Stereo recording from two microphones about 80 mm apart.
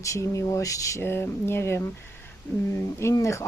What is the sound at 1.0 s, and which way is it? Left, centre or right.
Speech, left.